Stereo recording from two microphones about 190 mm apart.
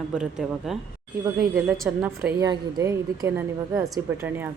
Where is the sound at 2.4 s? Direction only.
20° right (ahead or behind).